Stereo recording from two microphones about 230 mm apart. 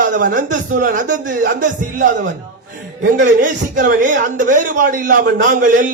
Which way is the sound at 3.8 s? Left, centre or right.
Right.